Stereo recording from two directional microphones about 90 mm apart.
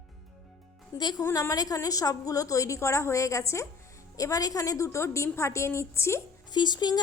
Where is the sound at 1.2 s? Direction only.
35° left (ahead or behind).